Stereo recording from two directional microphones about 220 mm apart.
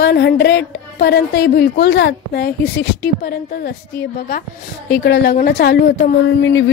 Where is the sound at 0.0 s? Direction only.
50° left (ahead or behind).